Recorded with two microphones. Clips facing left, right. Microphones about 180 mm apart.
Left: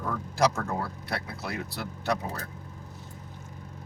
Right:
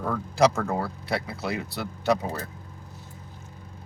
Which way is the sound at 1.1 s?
Centre (ahead or behind).